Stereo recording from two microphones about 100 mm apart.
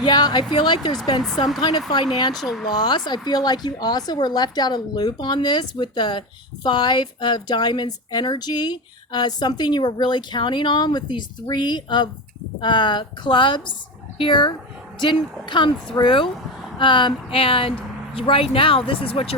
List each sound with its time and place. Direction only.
0.0 s a woman's voice: 45° left (ahead or behind)
2.4 s speech: centre (ahead or behind)
2.6 s a woman's voice: 45° left (ahead or behind); by 19.4 s 70° left (ahead or behind)